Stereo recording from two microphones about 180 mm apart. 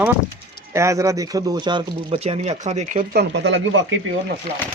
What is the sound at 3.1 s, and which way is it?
Speech, 70° right (ahead or behind).